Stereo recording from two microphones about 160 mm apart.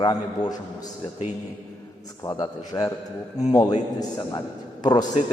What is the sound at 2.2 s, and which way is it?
A man's voice, 25° left (ahead or behind).